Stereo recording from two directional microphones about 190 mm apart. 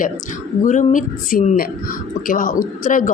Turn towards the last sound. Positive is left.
turn(degrees=45)  # may be behind; listen again after turning